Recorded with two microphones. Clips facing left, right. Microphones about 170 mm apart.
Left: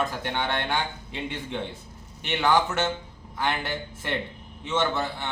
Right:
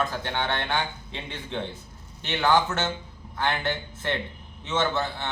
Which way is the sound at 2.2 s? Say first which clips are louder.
Even; 10° left (ahead or behind).